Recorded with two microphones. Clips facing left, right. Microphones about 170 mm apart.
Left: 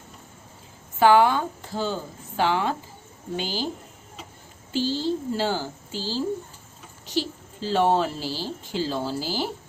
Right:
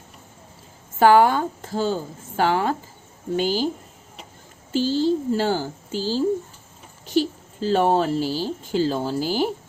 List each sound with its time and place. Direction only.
0.9 s speech: 45° right (ahead or behind)
4.7 s speech: 45° right (ahead or behind)